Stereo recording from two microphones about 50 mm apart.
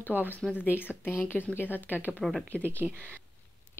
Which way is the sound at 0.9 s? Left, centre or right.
Right.